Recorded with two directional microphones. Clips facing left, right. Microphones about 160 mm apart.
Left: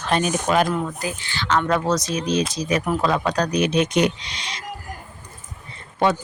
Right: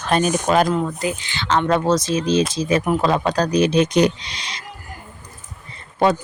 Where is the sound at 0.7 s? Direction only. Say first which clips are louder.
Right 4 dB; 20° right (ahead or behind).